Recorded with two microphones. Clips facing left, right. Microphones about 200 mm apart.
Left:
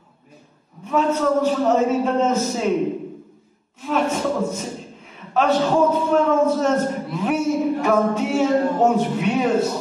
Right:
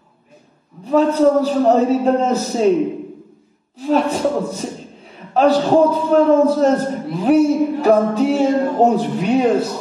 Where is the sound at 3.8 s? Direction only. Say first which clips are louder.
Right 5 dB; 35° right (ahead or behind).